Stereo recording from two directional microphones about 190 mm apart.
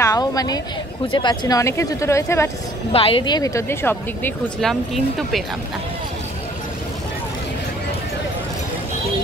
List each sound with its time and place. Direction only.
0.0 s a woman's voice: 20° left (ahead or behind)
2.9 s speech: 30° left (ahead or behind); by 5.4 s centre (ahead or behind)